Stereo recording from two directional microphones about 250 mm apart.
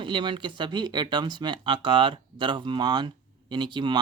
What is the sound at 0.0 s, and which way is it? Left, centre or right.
Speech, centre.